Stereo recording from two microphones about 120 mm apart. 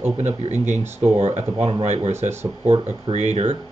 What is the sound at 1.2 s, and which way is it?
Speech, 65° right (ahead or behind).